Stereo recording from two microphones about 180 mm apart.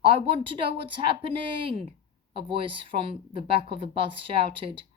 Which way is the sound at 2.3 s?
30° right (ahead or behind).